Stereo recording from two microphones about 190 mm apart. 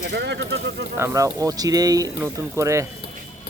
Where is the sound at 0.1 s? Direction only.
65° right (ahead or behind).